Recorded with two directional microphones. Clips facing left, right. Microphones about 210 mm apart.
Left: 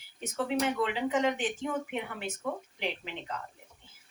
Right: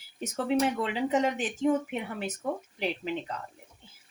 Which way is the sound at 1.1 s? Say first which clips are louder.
Right 1 dB; 35° right (ahead or behind).